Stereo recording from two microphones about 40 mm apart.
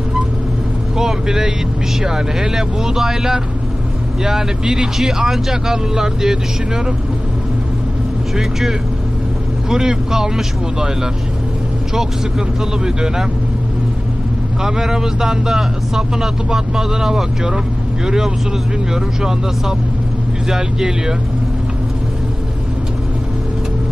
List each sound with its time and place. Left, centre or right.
0.9 s speech: centre
8.4 s speech: centre
14.6 s speech: centre
20.4 s speech: centre